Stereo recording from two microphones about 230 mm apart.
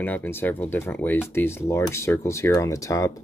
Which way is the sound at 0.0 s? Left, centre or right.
Centre.